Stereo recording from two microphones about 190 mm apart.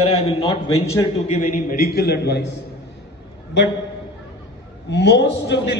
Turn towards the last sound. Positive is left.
turn(degrees=65)  # may be behind; listen again after turning